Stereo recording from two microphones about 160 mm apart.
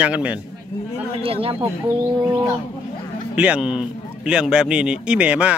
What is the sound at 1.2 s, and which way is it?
Speech, 35° right (ahead or behind).